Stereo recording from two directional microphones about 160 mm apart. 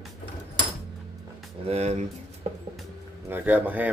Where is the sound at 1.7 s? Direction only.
45° right (ahead or behind).